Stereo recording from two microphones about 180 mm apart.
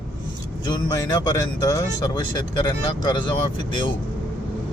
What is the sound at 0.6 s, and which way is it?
Speech, 25° left (ahead or behind).